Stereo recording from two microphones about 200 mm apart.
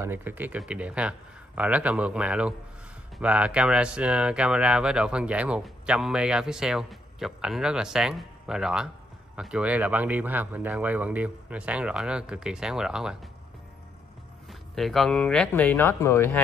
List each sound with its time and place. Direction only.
0.0 s speech: 10° right (ahead or behind)
14.5 s speech: centre (ahead or behind)